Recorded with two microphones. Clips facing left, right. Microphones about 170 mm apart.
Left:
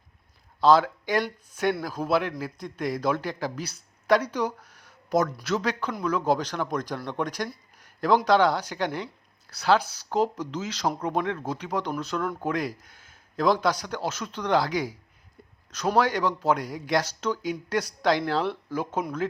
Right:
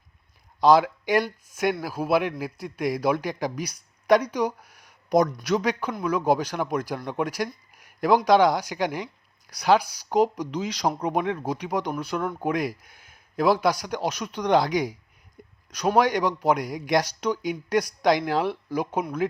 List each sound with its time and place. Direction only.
0.6 s speech: 15° right (ahead or behind)
15.4 s a sound: 15° right (ahead or behind)
16.0 s speech: 15° right (ahead or behind)